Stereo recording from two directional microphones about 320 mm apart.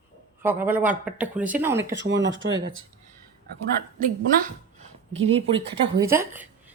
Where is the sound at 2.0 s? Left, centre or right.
Right.